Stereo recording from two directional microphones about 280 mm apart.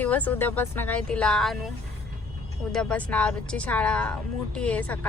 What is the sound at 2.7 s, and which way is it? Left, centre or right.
Speech, centre.